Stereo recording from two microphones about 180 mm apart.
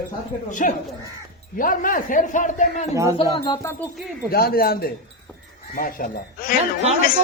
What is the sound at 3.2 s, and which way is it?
Speech, 25° left (ahead or behind).